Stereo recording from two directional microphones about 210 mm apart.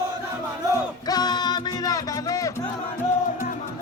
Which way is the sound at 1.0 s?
20° left (ahead or behind).